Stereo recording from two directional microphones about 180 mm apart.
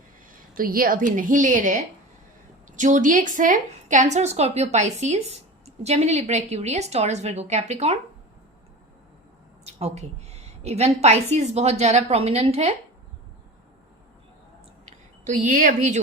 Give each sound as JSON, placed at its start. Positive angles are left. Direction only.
{"t": 0.5, "sound": "a woman's voice", "side_deg": -50}
{"t": 9.6, "sound": "a woman's voice", "side_deg": -35}
{"t": 15.2, "sound": "a woman's voice", "side_deg": -45}